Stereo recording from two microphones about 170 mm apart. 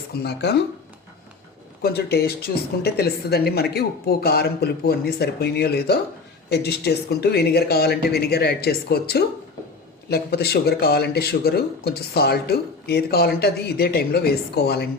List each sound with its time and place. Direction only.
0.1 s speech: 75° left (ahead or behind)
1.8 s speech: 70° left (ahead or behind)